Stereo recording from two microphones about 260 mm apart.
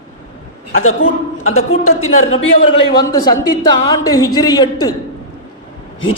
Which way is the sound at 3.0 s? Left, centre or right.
Centre.